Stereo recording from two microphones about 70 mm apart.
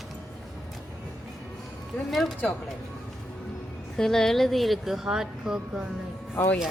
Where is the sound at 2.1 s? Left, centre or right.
Centre.